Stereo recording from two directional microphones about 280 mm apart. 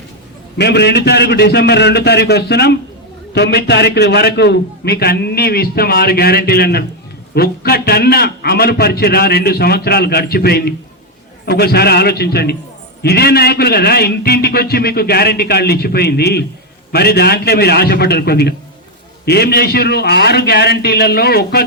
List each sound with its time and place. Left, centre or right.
0.5 s a man's voice: left